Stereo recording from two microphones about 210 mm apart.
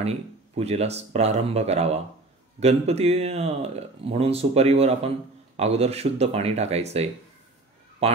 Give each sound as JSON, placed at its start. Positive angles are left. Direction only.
{"t": 0.6, "sound": "speech", "side_deg": -30}